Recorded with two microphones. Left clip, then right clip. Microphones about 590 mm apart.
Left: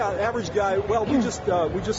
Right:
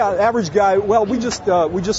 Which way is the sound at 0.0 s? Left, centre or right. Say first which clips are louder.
Right 8 dB; right.